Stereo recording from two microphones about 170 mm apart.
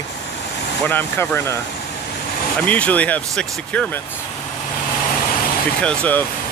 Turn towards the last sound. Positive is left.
turn(degrees=10)  # may be behind; listen again after turning